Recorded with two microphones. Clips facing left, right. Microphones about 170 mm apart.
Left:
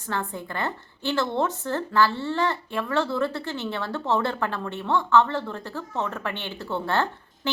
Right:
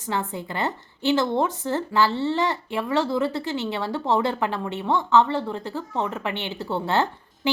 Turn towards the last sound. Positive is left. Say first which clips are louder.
# right 4 dB
turn(degrees=-20)  # may be behind; listen again after turning